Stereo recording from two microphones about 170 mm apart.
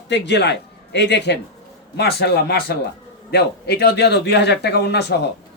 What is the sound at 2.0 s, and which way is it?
A man's voice, 75° left (ahead or behind).